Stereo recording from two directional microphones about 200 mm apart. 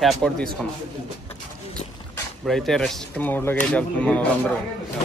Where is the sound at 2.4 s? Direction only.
Centre (ahead or behind).